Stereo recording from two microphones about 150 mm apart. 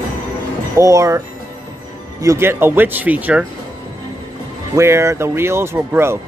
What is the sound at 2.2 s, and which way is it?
Speech, 20° right (ahead or behind).